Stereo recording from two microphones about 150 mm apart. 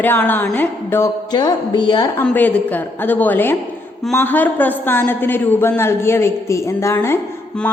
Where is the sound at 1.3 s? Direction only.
30° left (ahead or behind).